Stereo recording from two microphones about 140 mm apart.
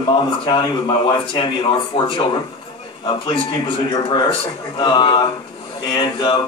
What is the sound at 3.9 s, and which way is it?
Speech, 30° left (ahead or behind).